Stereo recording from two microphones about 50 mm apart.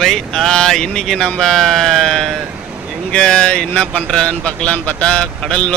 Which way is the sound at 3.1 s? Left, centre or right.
Centre.